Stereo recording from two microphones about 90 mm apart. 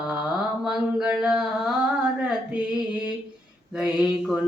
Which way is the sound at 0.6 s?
5° right (ahead or behind).